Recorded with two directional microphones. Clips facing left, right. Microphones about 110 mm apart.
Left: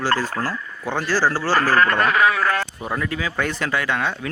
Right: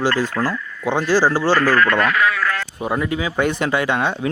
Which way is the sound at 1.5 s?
30° left (ahead or behind).